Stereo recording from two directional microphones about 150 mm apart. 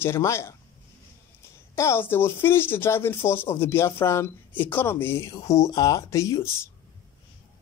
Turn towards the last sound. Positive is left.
turn(degrees=15)  # may be behind; listen again after turning